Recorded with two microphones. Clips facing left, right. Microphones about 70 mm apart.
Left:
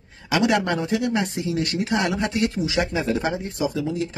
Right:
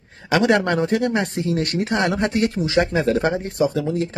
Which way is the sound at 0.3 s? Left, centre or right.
Right.